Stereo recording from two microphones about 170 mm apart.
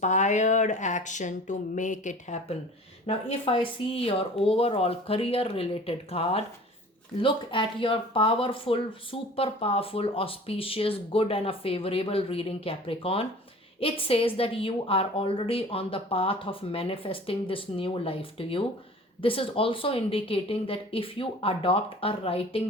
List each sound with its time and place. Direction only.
0.0 s a woman's voice: 45° left (ahead or behind)